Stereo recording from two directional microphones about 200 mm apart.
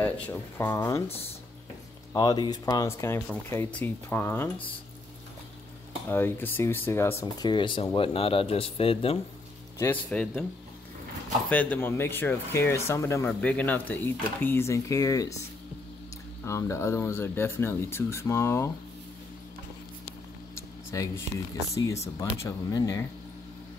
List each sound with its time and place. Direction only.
0.0 s speech: 10° left (ahead or behind)
1.0 s speech: 30° left (ahead or behind); by 4.5 s 10° left (ahead or behind)
6.0 s speech: 10° left (ahead or behind); by 9.2 s 30° left (ahead or behind)
9.8 s speech: 5° left (ahead or behind)
11.4 s speech: 5° left (ahead or behind)
16.4 s speech: 15° left (ahead or behind)
20.9 s speech: 15° left (ahead or behind)